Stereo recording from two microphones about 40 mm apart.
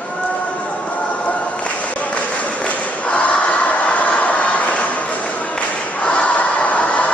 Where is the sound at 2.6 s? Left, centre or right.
Left.